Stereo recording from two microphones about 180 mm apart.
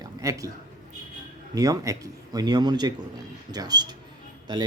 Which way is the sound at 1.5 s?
20° right (ahead or behind).